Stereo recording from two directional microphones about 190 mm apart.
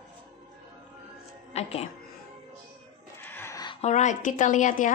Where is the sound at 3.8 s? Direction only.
40° left (ahead or behind).